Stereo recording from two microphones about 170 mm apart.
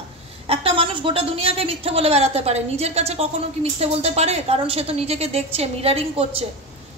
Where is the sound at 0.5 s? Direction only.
30° right (ahead or behind).